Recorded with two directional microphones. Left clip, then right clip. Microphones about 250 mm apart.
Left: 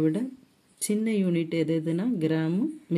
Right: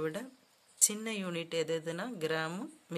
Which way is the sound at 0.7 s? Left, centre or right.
Centre.